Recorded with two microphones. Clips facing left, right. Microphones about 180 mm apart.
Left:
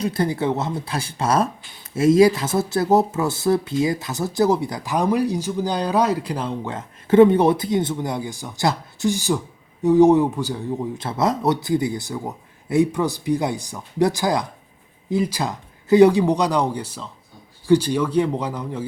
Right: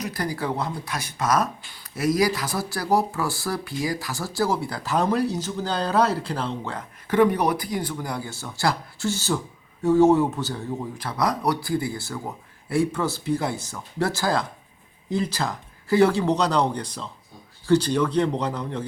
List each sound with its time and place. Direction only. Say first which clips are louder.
0.0 s a man's voice: left 6 dB; 25° left (ahead or behind)
10.9 s a man's voice: left 3 dB; 25° left (ahead or behind); by 18.9 s 5° left (ahead or behind)